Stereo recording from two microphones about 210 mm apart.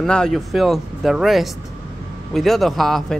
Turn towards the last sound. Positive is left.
turn(degrees=0)  # may be behind; listen again after turning